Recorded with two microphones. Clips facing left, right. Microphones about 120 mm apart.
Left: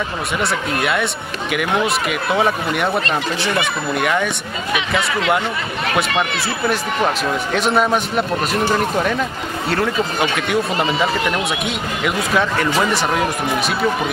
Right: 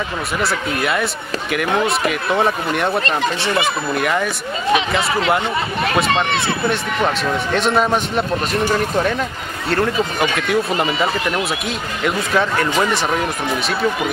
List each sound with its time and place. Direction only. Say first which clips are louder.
1.5 s speech: even; centre (ahead or behind)
3.4 s speech: right 1 dB; 30° right (ahead or behind)
3.9 s speech: left 2 dB; centre (ahead or behind)
4.7 s speech: right 1 dB; 30° right (ahead or behind)
6.4 s speech: even; 5° left (ahead or behind)
10.3 s speech: right 1 dB; centre (ahead or behind)